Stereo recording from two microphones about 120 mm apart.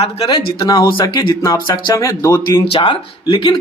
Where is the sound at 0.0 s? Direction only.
50° left (ahead or behind).